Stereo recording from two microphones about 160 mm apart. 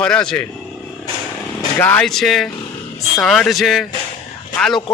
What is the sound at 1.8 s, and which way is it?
Speech, 5° left (ahead or behind).